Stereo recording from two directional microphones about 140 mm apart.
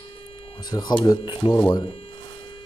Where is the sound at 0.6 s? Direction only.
30° left (ahead or behind).